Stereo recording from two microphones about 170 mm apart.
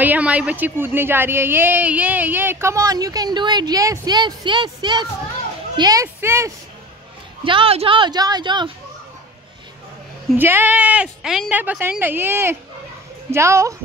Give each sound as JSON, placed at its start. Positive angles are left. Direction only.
{"t": 0.0, "sound": "a woman's voice", "side_deg": -10}
{"t": 7.4, "sound": "a woman's voice", "side_deg": -30}
{"t": 10.3, "sound": "speech", "side_deg": -10}